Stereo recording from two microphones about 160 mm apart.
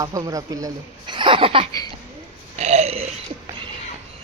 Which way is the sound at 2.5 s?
40° right (ahead or behind).